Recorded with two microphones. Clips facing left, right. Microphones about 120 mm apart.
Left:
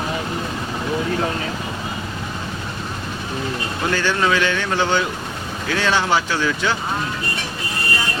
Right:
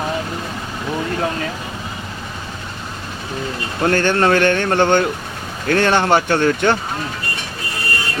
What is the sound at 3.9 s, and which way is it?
Speech, 55° right (ahead or behind).